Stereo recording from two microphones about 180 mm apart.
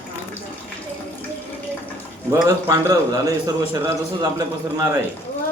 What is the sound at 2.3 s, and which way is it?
A man's voice, 15° right (ahead or behind).